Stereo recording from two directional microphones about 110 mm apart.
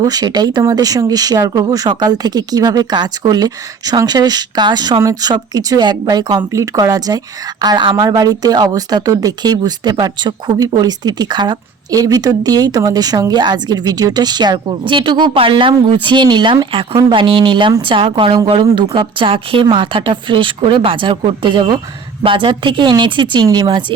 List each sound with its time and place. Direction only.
0.0 s a woman's voice: 35° right (ahead or behind)